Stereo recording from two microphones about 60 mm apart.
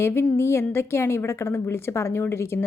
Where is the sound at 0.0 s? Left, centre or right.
Left.